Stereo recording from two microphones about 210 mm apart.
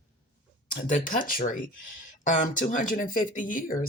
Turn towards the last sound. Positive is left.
turn(degrees=40)  # may be behind; listen again after turning